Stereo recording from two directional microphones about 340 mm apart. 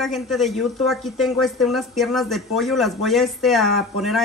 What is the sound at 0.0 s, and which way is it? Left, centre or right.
A woman's voice, centre.